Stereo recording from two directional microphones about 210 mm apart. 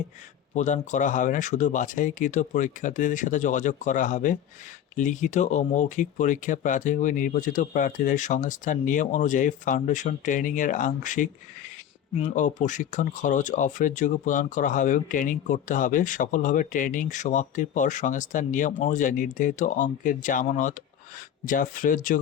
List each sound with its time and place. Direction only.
0.5 s speech: 35° left (ahead or behind)
12.3 s speech: 35° left (ahead or behind)